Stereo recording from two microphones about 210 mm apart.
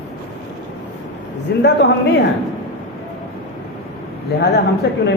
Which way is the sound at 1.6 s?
50° left (ahead or behind).